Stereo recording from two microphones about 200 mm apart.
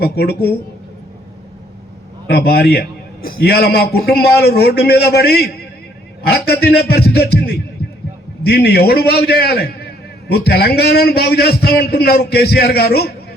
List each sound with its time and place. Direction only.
0.0 s a man's voice: 55° left (ahead or behind)
2.2 s a man's voice: 55° left (ahead or behind)